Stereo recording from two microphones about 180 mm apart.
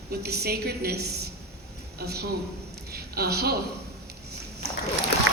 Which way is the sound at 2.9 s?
60° right (ahead or behind).